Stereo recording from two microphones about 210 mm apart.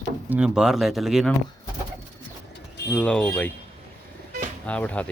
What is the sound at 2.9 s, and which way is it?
Speech, 5° left (ahead or behind).